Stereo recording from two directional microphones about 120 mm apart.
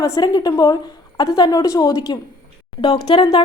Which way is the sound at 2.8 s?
45° left (ahead or behind).